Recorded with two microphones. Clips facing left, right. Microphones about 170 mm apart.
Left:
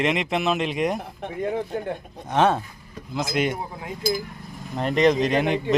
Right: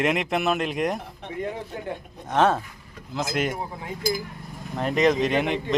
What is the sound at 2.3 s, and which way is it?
Speech, centre (ahead or behind).